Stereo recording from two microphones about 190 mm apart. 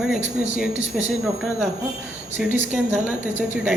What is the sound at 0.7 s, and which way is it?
Speech, 75° right (ahead or behind).